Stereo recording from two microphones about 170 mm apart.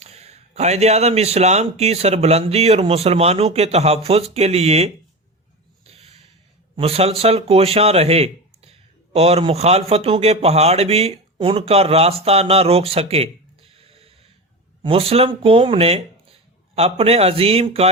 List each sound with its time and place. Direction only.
0.0 s a man's voice: 40° right (ahead or behind)
5.8 s snort: 35° right (ahead or behind)
6.7 s a man's voice: 35° right (ahead or behind)
13.7 s a sound: 35° right (ahead or behind)
14.8 s a man's voice: 35° right (ahead or behind)